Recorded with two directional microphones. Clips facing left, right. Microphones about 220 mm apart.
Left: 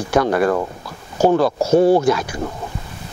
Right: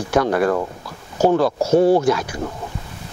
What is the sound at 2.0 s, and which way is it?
Speech, 10° left (ahead or behind).